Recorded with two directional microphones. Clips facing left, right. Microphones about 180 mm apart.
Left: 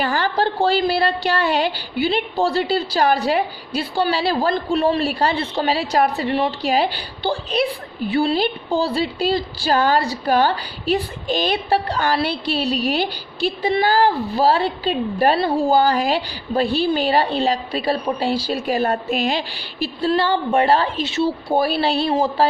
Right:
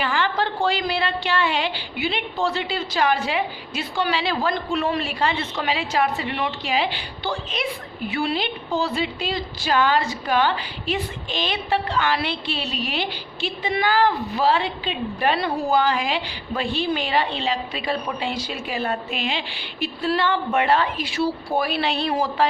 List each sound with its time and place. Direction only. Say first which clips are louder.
0.0 s a woman's voice: left 3 dB; 40° left (ahead or behind)